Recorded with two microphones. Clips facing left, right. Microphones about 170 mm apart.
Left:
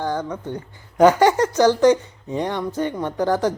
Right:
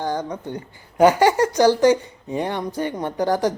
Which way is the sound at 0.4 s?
10° right (ahead or behind).